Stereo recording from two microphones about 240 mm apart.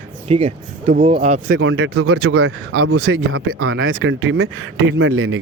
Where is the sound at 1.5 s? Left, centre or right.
Right.